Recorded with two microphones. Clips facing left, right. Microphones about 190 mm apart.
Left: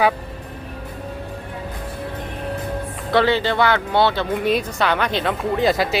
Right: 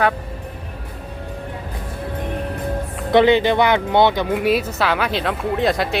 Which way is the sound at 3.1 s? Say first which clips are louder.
Right 4 dB; 20° right (ahead or behind).